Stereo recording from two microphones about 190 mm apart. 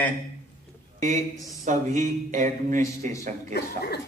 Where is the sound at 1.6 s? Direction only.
40° right (ahead or behind).